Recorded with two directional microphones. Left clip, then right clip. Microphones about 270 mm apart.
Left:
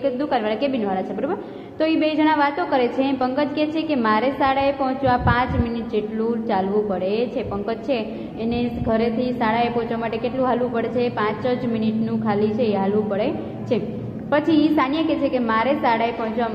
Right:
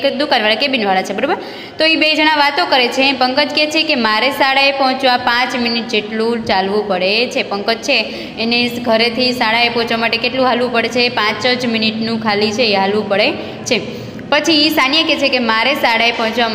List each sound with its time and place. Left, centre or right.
0.0 s a woman's voice: right
6.5 s a woman's voice: right